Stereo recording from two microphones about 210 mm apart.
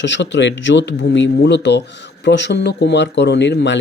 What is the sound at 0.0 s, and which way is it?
Speech, 55° left (ahead or behind).